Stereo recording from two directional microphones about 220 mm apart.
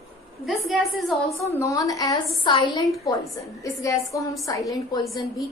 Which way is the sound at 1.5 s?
15° left (ahead or behind).